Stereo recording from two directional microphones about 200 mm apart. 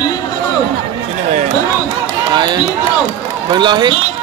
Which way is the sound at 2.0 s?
20° right (ahead or behind).